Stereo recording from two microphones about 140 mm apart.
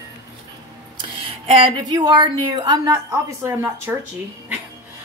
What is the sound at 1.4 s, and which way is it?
Speech, 40° right (ahead or behind).